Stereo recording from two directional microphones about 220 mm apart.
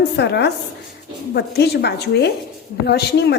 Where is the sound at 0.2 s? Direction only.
50° left (ahead or behind).